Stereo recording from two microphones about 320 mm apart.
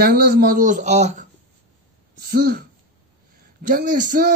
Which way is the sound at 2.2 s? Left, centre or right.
Right.